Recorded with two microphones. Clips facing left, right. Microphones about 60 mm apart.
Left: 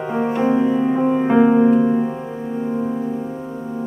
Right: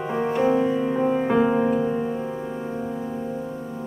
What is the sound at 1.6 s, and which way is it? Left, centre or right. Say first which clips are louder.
Keyboard: left 7 dB; centre.